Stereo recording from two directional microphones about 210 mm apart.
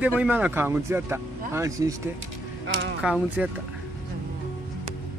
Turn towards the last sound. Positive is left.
turn(degrees=-5)  # may be behind; listen again after turning